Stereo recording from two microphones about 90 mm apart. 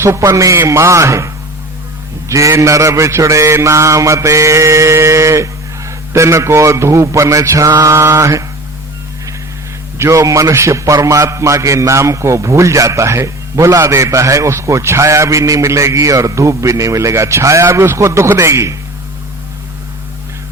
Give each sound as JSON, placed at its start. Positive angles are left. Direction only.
{"t": 0.0, "sound": "a man's voice", "side_deg": -30}
{"t": 2.3, "sound": "a man's voice", "side_deg": -35}
{"t": 10.0, "sound": "a man's voice", "side_deg": -35}